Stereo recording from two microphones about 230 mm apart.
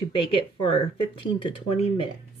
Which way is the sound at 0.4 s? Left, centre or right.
Left.